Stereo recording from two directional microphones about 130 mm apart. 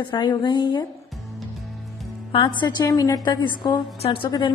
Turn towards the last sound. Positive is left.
turn(degrees=40)  # may be behind; listen again after turning